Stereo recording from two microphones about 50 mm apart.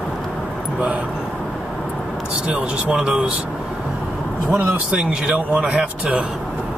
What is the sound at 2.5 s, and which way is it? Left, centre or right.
Speech, centre.